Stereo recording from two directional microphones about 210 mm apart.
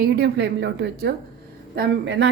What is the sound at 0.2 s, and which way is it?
A woman's voice, 50° right (ahead or behind).